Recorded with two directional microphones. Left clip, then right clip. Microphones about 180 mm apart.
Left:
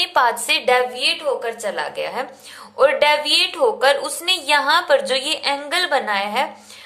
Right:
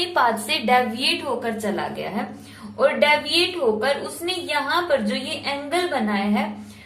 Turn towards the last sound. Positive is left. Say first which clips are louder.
# left 4 dB
turn(degrees=50)  # may be behind; listen again after turning